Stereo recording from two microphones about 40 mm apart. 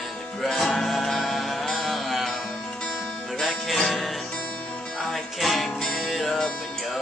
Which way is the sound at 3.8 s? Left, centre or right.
Centre.